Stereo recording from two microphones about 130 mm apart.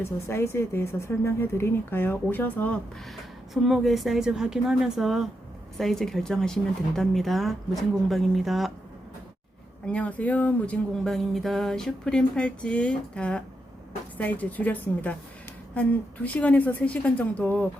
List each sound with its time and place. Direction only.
0.0 s a woman's voice: 20° left (ahead or behind)
3.5 s speech: centre (ahead or behind)
9.8 s speech: 10° left (ahead or behind)